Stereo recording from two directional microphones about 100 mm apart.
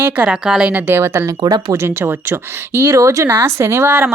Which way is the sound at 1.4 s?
40° right (ahead or behind).